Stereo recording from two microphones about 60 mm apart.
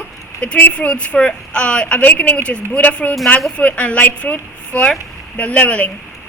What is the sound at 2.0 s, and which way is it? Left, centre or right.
A woman's voice, left.